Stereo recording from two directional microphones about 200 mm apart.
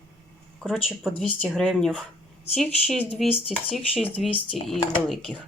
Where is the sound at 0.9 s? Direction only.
Centre (ahead or behind).